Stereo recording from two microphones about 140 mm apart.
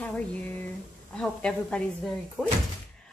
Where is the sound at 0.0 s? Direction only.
10° left (ahead or behind).